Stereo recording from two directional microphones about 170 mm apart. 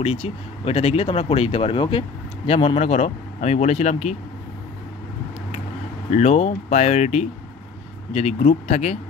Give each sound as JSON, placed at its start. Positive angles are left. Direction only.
{"t": 0.0, "sound": "speech", "side_deg": 35}
{"t": 6.0, "sound": "speech", "side_deg": 40}